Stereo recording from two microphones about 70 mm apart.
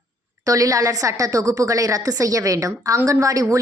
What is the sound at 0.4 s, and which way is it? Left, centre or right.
A woman's voice, right.